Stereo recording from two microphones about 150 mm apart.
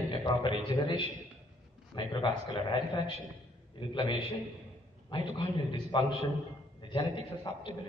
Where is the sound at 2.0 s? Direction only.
30° left (ahead or behind).